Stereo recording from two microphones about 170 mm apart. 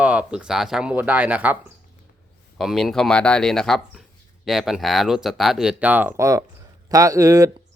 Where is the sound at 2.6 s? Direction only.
Centre (ahead or behind).